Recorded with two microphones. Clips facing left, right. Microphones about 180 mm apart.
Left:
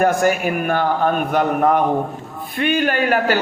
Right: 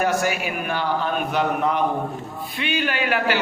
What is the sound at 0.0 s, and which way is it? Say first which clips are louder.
A man's voice: left 6 dB; 50° left (ahead or behind).